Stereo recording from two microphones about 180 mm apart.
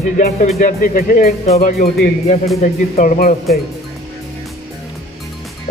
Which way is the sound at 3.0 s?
55° left (ahead or behind).